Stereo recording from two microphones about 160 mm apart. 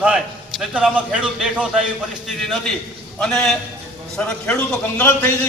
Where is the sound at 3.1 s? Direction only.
5° left (ahead or behind).